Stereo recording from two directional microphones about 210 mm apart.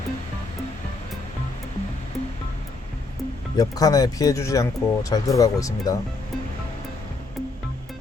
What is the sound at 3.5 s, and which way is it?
Speech, 15° left (ahead or behind).